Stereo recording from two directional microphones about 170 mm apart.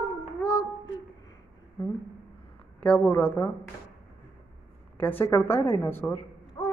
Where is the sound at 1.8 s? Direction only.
15° left (ahead or behind).